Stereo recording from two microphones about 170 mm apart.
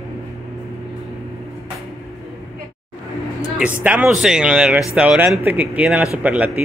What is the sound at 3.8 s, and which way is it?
Speech, 10° right (ahead or behind).